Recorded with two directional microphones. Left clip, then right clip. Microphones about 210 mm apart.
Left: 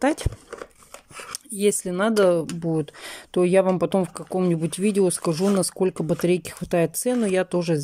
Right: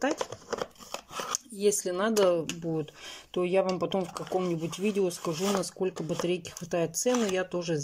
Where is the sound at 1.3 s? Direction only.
20° left (ahead or behind).